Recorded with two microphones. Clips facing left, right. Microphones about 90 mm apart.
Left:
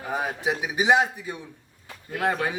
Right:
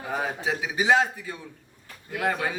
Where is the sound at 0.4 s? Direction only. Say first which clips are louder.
Left 2 dB; 15° left (ahead or behind).